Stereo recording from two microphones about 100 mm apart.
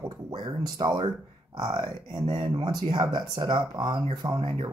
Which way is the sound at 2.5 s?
45° right (ahead or behind).